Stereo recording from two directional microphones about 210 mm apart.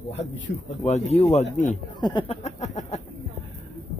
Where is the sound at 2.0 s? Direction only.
20° left (ahead or behind).